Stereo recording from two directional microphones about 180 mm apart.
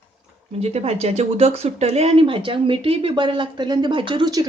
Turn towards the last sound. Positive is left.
turn(degrees=-20)  # may be behind; listen again after turning